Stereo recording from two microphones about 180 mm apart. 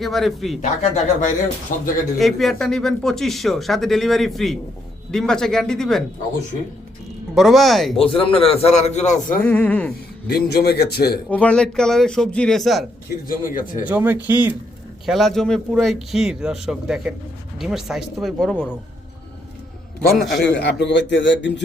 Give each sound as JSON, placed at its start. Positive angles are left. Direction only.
{"t": 0.0, "sound": "speech", "side_deg": 0}
{"t": 0.6, "sound": "speech", "side_deg": 40}
{"t": 2.1, "sound": "speech", "side_deg": 0}
{"t": 7.3, "sound": "speech", "side_deg": 0}
{"t": 7.9, "sound": "a man's voice", "side_deg": 30}
{"t": 9.4, "sound": "speech", "side_deg": 10}
{"t": 10.2, "sound": "a man's voice", "side_deg": 65}
{"t": 11.3, "sound": "speech", "side_deg": 5}
{"t": 13.2, "sound": "speech", "side_deg": 50}
{"t": 13.8, "sound": "speech", "side_deg": -10}
{"t": 20.5, "sound": "a man's voice", "side_deg": 70}